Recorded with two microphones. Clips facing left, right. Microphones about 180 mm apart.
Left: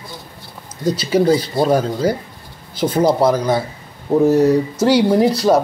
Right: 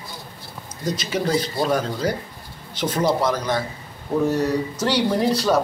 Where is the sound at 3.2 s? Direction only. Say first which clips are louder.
Left 7 dB; 30° left (ahead or behind).